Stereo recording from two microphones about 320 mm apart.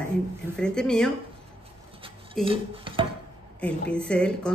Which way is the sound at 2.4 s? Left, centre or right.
Centre.